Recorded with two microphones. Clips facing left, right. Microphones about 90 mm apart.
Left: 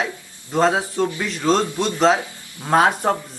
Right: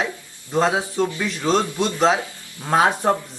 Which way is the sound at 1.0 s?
20° left (ahead or behind).